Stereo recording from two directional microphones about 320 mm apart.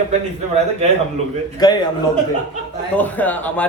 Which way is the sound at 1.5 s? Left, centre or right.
Centre.